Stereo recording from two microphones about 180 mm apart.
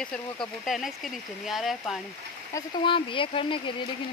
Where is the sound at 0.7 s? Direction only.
Centre (ahead or behind).